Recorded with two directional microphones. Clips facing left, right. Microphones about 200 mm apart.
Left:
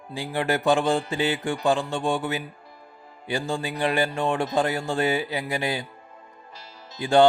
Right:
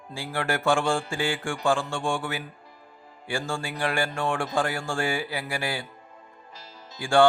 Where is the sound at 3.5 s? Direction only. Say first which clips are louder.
Left 4 dB; 20° left (ahead or behind).